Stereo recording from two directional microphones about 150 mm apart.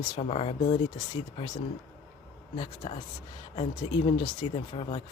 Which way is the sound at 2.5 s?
35° left (ahead or behind).